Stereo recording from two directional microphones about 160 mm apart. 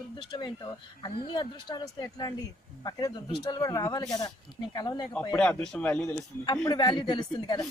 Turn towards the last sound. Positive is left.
turn(degrees=25)  # may be behind; listen again after turning